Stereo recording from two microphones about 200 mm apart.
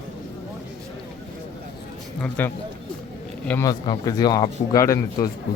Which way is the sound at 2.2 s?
10° left (ahead or behind).